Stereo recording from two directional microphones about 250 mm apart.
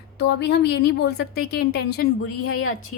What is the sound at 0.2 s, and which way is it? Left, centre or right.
A woman's voice, left.